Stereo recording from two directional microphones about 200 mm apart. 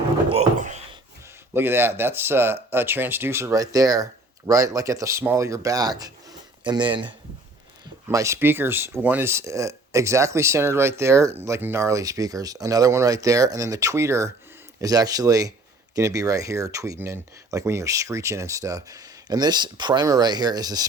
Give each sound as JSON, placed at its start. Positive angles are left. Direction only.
{"t": 0.3, "sound": "a sound", "side_deg": -35}
{"t": 1.5, "sound": "speech", "side_deg": -10}
{"t": 8.1, "sound": "speech", "side_deg": -15}